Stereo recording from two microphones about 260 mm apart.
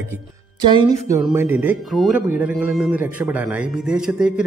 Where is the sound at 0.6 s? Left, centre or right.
Centre.